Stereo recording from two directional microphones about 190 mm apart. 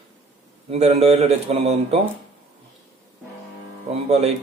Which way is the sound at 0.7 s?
35° right (ahead or behind).